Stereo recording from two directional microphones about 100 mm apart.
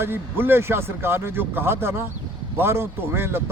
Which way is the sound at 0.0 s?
25° right (ahead or behind).